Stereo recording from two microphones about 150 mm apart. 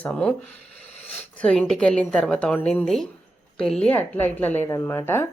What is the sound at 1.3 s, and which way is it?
Speech, 10° left (ahead or behind).